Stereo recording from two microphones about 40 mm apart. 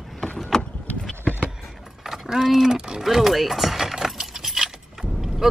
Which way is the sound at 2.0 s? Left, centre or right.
Centre.